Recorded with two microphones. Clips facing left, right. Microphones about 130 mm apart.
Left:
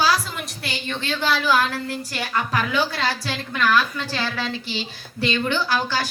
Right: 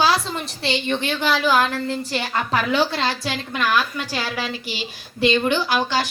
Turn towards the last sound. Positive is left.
turn(degrees=-20)  # may be behind; listen again after turning